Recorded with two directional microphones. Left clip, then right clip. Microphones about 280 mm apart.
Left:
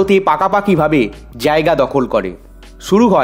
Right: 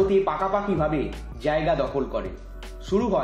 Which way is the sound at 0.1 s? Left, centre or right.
Left.